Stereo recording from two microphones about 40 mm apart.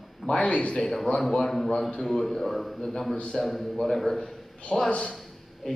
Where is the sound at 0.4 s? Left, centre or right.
Left.